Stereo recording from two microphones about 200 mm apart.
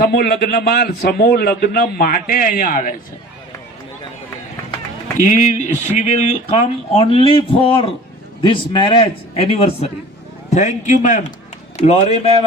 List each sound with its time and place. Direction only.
0.0 s a man's voice: 50° left (ahead or behind)
5.2 s a man's voice: 35° left (ahead or behind)